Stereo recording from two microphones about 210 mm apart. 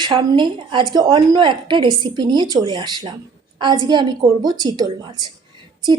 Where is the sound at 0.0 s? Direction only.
20° right (ahead or behind).